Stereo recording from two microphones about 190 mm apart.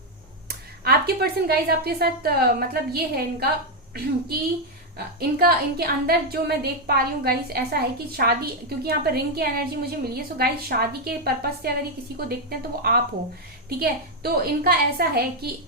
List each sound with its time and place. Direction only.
0.4 s a woman's voice: 55° right (ahead or behind)
4.9 s a woman's voice: 55° right (ahead or behind)